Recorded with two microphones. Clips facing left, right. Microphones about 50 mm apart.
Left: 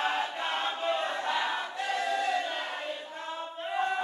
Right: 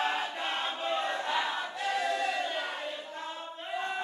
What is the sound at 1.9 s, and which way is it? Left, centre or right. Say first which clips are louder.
Choir: left 2 dB; centre.